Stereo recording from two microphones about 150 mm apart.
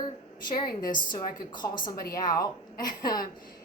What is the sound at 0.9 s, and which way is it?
Speech, 30° left (ahead or behind).